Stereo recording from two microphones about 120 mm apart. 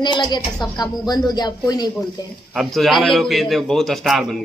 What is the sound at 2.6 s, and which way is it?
A man's voice, centre (ahead or behind).